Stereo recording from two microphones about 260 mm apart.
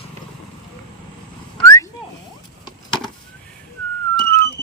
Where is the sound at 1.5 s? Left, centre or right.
Centre.